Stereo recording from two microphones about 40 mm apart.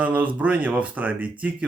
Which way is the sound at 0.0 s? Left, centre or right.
Right.